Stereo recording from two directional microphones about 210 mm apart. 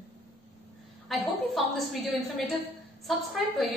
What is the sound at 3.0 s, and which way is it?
Speech, centre (ahead or behind).